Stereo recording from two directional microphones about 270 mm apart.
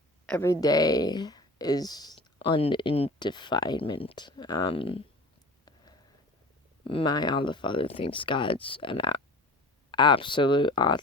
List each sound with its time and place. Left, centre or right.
0.3 s speech: centre
5.6 s a sound: centre
6.8 s speech: centre